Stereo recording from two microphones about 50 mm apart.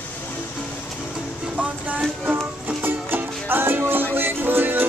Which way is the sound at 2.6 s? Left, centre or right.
Right.